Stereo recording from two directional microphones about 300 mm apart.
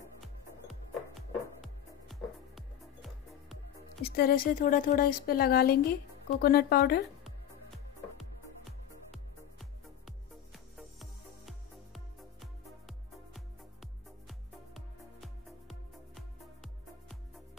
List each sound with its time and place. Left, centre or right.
0.2 s music: centre
4.0 s speech: left
8.2 s music: centre